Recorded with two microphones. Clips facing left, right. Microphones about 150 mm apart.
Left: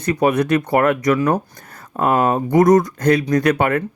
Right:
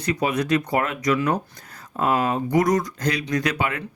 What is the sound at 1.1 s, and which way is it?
Speech, 45° left (ahead or behind).